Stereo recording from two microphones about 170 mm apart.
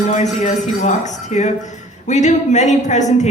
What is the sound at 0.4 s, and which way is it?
A woman's voice, 45° left (ahead or behind).